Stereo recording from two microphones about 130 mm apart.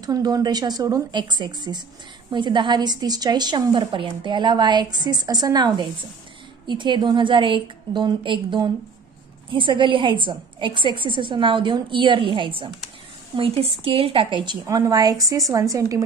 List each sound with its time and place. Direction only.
0.0 s a woman's voice: 30° right (ahead or behind)